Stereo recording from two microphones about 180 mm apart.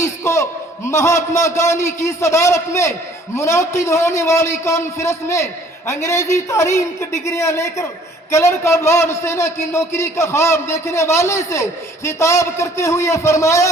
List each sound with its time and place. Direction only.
0.0 s a man's voice: 15° left (ahead or behind)